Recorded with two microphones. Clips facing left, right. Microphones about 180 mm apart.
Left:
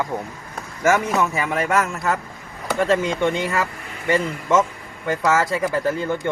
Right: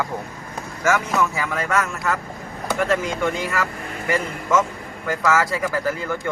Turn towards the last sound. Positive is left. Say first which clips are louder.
# left 2 dB
turn(degrees=25)  # may be behind; listen again after turning